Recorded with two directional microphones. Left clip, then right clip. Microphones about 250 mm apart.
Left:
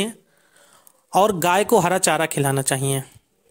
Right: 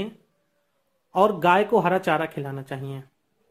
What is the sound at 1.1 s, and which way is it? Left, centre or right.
Speech, left.